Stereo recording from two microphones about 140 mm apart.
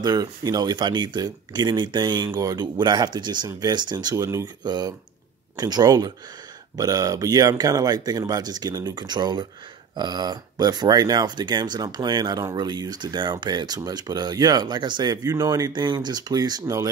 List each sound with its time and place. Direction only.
0.0 s speech: 25° right (ahead or behind)